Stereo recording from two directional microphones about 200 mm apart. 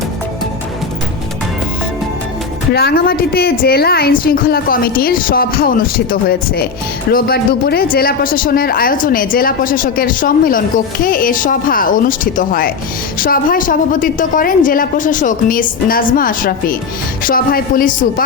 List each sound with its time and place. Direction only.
2.7 s speech: 50° left (ahead or behind)